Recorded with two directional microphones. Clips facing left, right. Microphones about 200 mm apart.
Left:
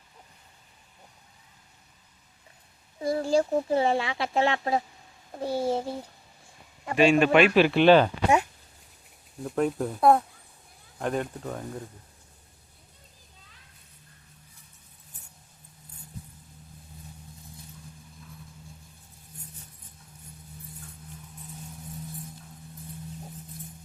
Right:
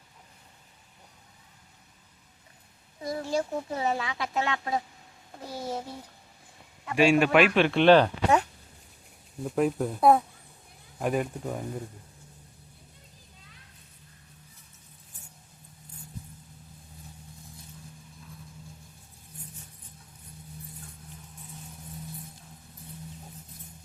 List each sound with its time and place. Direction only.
3.0 s speech: 30° left (ahead or behind)
6.9 s speech: 10° right (ahead or behind)